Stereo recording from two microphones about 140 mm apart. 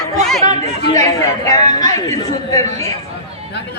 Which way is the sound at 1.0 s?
25° left (ahead or behind).